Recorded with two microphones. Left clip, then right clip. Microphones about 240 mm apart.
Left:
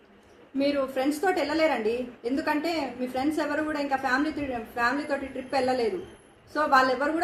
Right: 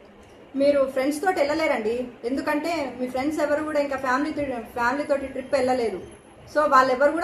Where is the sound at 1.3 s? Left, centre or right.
Centre.